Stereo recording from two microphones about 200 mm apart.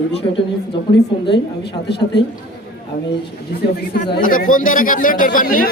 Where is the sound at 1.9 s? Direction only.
55° left (ahead or behind).